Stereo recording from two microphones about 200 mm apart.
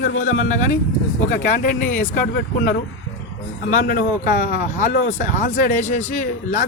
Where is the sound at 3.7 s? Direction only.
40° left (ahead or behind).